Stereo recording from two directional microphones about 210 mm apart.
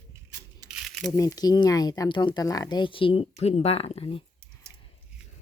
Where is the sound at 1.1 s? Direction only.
15° left (ahead or behind).